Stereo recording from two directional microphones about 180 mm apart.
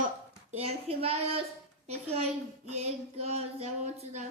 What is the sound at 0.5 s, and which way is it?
Child singing, 35° right (ahead or behind).